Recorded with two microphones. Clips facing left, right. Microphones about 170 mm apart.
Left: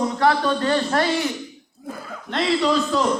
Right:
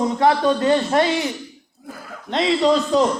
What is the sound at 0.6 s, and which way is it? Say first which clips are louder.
Speech: right 3 dB; 20° right (ahead or behind).